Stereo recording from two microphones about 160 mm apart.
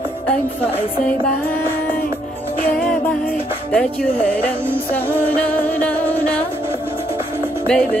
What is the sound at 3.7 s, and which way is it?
Speech, 5° left (ahead or behind).